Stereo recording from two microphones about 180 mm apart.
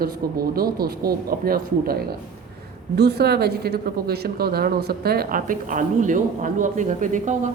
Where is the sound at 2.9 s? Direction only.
65° right (ahead or behind).